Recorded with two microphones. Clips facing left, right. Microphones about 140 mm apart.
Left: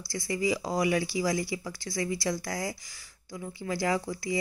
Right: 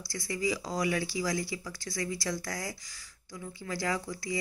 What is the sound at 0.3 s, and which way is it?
Speech, 20° left (ahead or behind).